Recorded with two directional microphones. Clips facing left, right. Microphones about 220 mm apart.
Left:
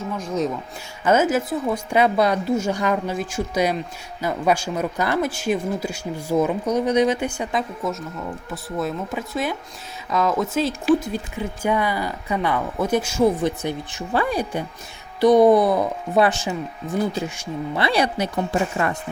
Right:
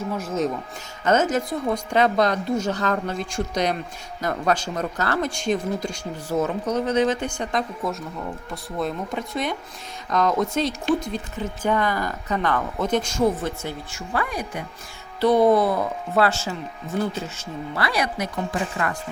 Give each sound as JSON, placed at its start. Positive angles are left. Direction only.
{"t": 0.2, "sound": "speech", "side_deg": 0}
{"t": 1.0, "sound": "speech", "side_deg": 10}
{"t": 15.2, "sound": "speech", "side_deg": 15}
{"t": 17.8, "sound": "speech", "side_deg": 30}